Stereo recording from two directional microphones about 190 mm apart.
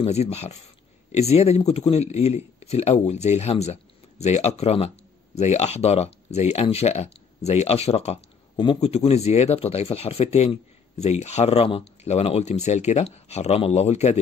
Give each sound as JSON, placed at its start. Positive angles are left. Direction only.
{"t": 0.0, "sound": "speech", "side_deg": 35}